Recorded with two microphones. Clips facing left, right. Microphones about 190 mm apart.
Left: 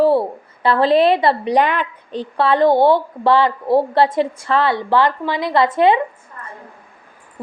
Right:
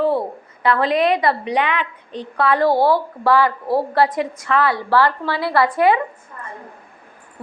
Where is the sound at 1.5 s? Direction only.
40° left (ahead or behind).